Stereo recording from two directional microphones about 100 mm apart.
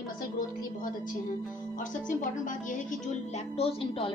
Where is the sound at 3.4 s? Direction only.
75° left (ahead or behind).